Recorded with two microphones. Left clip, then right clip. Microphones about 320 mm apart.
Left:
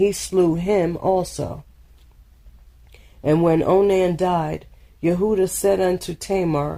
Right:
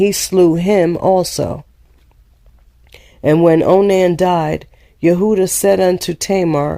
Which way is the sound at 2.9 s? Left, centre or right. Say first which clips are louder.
Right 6 dB; right.